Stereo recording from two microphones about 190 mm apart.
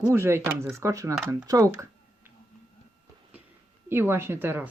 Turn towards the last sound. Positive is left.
turn(degrees=-10)  # may be behind; listen again after turning